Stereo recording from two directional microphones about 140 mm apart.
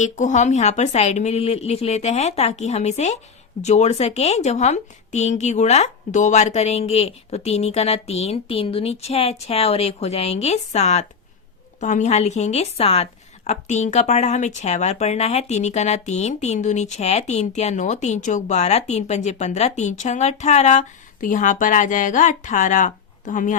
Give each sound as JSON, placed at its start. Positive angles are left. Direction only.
{"t": 0.0, "sound": "a woman's voice", "side_deg": 60}